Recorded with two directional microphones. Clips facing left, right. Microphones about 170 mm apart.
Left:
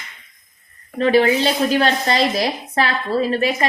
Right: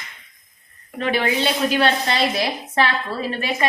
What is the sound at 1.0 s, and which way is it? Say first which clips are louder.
A woman's voice: left 6 dB; 35° left (ahead or behind).